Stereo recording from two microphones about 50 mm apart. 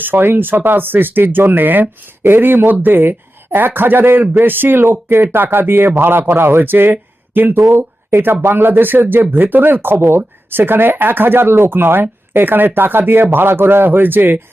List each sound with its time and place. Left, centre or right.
0.0 s speech: right
7.7 s speech: right